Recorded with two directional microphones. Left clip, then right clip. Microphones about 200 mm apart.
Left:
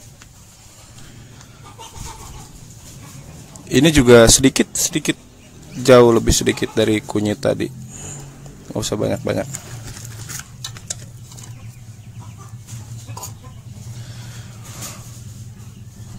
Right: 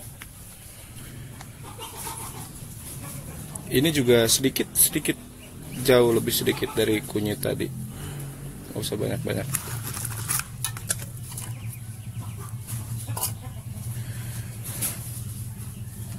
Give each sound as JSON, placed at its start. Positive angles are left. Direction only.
{"t": 3.7, "sound": "speech", "side_deg": 35}
{"t": 8.7, "sound": "speech", "side_deg": 35}